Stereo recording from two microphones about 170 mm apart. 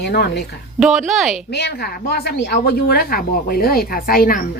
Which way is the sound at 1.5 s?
75° left (ahead or behind).